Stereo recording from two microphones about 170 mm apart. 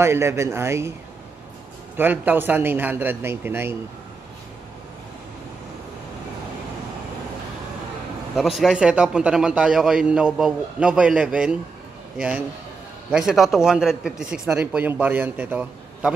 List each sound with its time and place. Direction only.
0.0 s a man's voice: 15° right (ahead or behind)
2.0 s a man's voice: 10° right (ahead or behind)
8.4 s a man's voice: centre (ahead or behind)